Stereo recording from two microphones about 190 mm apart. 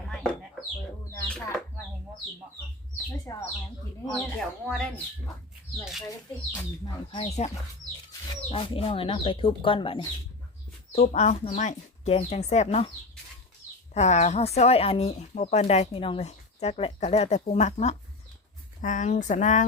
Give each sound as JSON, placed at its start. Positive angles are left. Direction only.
{"t": 0.0, "sound": "bird", "side_deg": 0}
{"t": 1.3, "sound": "speech", "side_deg": 5}
{"t": 3.3, "sound": "speech", "side_deg": 15}
{"t": 6.8, "sound": "speech", "side_deg": 25}
{"t": 13.9, "sound": "speech", "side_deg": 35}